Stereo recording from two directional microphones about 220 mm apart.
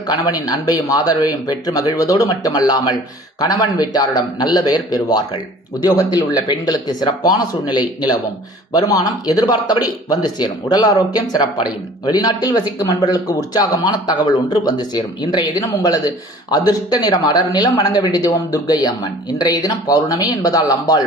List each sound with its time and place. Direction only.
0.3 s speech: 15° left (ahead or behind)